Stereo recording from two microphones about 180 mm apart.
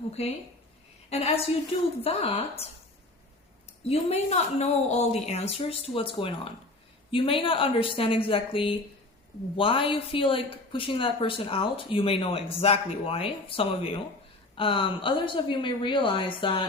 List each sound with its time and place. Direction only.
1.1 s speech: 35° left (ahead or behind)
3.8 s speech: 35° left (ahead or behind)